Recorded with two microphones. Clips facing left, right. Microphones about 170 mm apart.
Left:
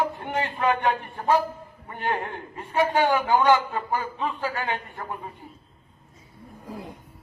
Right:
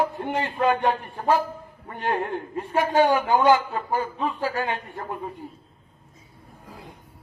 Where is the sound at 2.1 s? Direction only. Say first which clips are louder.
Right 3 dB; 35° right (ahead or behind).